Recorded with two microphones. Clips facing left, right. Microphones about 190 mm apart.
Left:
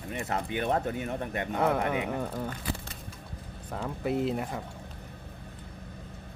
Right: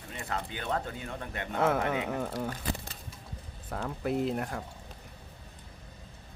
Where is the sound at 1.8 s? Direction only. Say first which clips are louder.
Left 1 dB; 15° left (ahead or behind).